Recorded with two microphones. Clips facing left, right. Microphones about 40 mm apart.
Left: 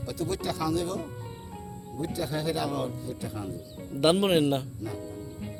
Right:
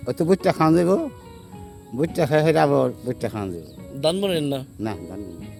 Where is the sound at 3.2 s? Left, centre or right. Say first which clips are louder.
Right 9 dB; right.